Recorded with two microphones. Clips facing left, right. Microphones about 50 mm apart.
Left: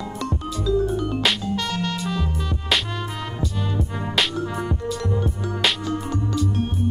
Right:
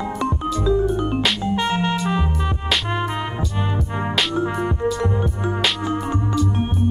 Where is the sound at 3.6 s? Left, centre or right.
Right.